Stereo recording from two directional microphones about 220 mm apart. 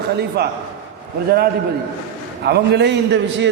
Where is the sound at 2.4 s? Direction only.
50° right (ahead or behind).